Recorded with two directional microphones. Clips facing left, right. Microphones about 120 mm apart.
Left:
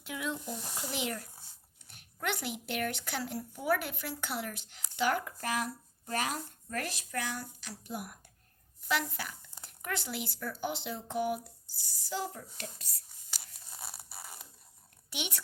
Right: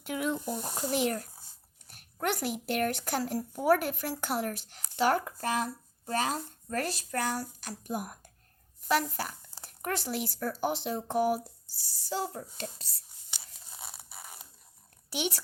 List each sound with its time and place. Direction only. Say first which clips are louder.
0.0 s speech: right 6 dB; 50° right (ahead or behind)
1.9 s a sound: right 4 dB; 45° right (ahead or behind)
2.6 s speech: right 6 dB; 45° right (ahead or behind)
13.4 s tearing: right 1 dB; 20° right (ahead or behind)
15.1 s a woman's voice: right 7 dB; 35° right (ahead or behind)